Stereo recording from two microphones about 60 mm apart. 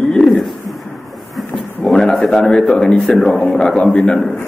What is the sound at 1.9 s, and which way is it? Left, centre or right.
A man's voice, centre.